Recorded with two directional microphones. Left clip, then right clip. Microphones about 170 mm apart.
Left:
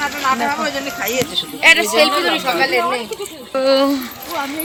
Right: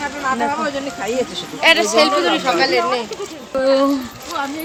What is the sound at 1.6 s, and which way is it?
Speech, 30° right (ahead or behind).